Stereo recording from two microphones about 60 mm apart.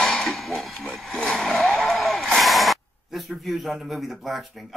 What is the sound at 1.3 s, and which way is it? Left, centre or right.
Vehicle, centre.